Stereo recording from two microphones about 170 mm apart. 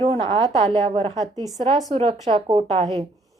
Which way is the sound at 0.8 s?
35° right (ahead or behind).